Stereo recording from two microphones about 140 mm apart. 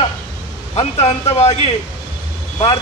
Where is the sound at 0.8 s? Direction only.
50° left (ahead or behind).